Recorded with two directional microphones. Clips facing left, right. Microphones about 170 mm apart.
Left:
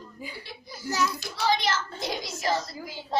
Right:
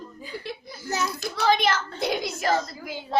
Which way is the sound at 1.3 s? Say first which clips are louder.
Right 4 dB; 55° right (ahead or behind).